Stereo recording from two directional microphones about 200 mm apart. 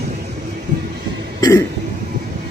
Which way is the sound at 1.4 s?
15° left (ahead or behind).